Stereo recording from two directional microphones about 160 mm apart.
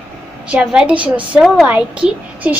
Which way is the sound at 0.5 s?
5° right (ahead or behind).